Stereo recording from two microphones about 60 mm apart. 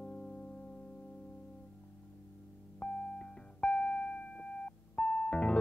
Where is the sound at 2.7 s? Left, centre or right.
Centre.